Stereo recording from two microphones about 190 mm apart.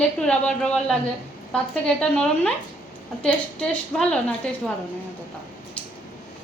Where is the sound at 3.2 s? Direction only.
5° left (ahead or behind).